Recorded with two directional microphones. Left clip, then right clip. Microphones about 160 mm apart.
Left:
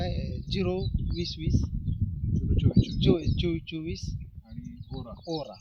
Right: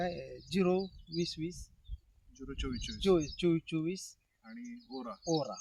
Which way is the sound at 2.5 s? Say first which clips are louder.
Left 10 dB; 5° left (ahead or behind).